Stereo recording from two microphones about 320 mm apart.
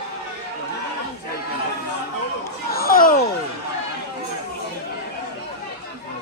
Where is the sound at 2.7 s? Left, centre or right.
Left.